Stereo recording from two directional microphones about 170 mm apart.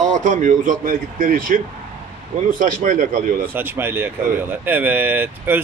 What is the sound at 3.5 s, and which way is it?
Speech, 10° right (ahead or behind).